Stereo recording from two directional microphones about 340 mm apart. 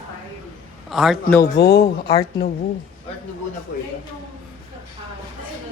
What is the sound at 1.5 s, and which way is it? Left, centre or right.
Speech, left.